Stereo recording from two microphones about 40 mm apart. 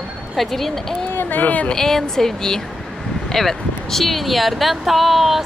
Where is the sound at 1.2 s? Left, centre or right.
Left.